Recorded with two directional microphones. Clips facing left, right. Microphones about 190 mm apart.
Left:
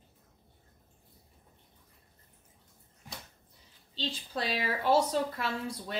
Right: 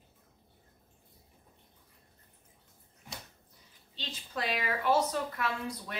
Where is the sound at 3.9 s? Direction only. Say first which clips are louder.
Left 4 dB; 30° left (ahead or behind).